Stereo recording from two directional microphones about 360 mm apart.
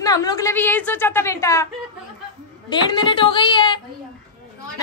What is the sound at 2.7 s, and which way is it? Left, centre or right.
A woman's voice, centre.